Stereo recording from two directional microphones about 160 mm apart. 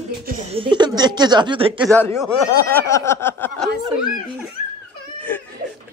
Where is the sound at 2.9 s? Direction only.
15° left (ahead or behind).